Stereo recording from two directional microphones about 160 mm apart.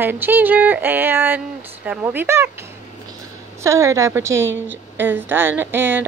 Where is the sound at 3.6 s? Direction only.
20° right (ahead or behind).